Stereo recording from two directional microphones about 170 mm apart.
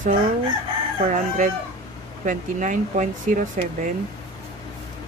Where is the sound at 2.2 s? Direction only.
50° right (ahead or behind).